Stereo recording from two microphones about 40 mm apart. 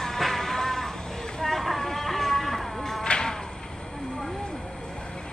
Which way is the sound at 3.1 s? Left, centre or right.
Centre.